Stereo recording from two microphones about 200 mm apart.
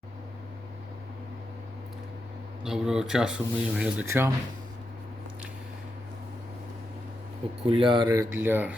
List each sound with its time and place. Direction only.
2.6 s speech: 5° right (ahead or behind)
7.7 s speech: 25° right (ahead or behind); by 8.7 s 10° right (ahead or behind)